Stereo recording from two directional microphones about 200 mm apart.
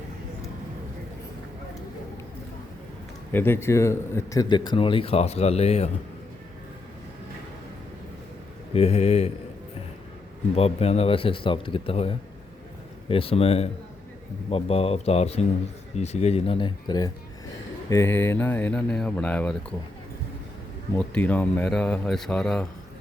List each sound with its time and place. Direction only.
3.3 s a man's voice: 10° left (ahead or behind); by 5.9 s 30° left (ahead or behind)
8.7 s speech: 30° left (ahead or behind)
10.5 s a man's voice: 30° left (ahead or behind); by 19.5 s 5° left (ahead or behind)
20.9 s speech: 5° left (ahead or behind)